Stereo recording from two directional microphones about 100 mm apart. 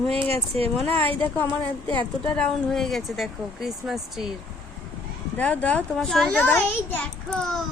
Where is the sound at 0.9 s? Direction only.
65° right (ahead or behind).